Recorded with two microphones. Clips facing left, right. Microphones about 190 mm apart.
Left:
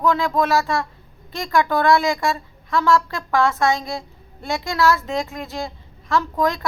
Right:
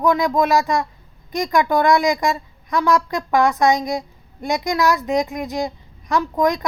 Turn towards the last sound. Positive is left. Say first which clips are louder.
# right 2 dB
turn(degrees=-15)  # may be behind; listen again after turning